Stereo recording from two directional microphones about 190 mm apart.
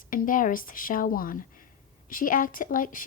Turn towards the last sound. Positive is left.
turn(degrees=45)  # may be behind; listen again after turning